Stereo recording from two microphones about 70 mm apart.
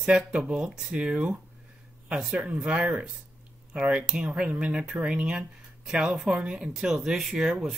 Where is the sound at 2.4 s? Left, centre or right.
Centre.